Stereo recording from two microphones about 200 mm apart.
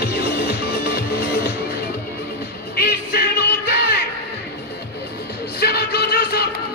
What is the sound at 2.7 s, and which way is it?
Music, 50° left (ahead or behind).